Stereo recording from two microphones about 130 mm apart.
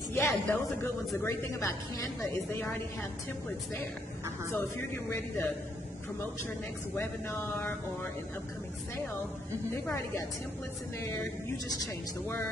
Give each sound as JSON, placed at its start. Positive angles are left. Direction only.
{"t": 0.1, "sound": "a woman's voice", "side_deg": 20}
{"t": 4.5, "sound": "a woman's voice", "side_deg": 20}
{"t": 7.0, "sound": "a woman's voice", "side_deg": 20}
{"t": 11.5, "sound": "a woman's voice", "side_deg": 25}